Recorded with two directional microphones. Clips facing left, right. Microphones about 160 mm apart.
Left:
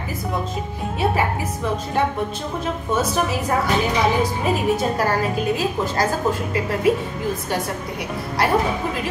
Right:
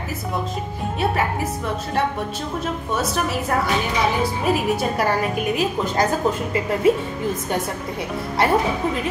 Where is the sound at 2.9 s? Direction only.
Centre (ahead or behind); by 6.0 s 15° right (ahead or behind).